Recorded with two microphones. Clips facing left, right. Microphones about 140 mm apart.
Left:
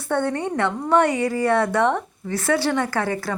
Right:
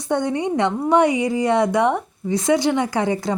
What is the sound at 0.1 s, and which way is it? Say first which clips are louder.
A woman's voice: right 2 dB; 15° right (ahead or behind).